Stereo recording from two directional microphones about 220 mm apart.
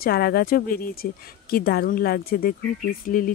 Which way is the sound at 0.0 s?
45° left (ahead or behind).